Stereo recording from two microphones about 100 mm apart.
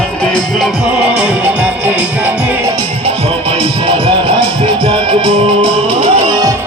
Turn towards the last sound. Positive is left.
turn(degrees=-60)  # may be behind; listen again after turning